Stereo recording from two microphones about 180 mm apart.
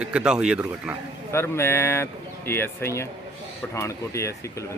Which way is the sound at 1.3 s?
15° left (ahead or behind).